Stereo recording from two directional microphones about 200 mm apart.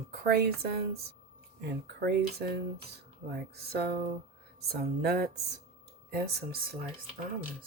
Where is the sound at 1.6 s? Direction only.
55° right (ahead or behind).